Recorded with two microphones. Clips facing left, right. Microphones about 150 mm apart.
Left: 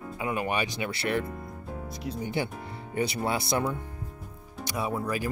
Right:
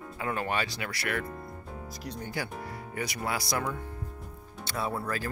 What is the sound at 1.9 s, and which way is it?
Speech, centre (ahead or behind).